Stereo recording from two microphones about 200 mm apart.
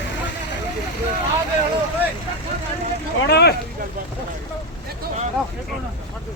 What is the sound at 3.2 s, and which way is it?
Speech, 55° left (ahead or behind).